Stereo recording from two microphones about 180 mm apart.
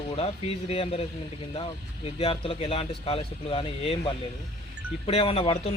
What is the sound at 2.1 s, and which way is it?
Speech, 30° left (ahead or behind).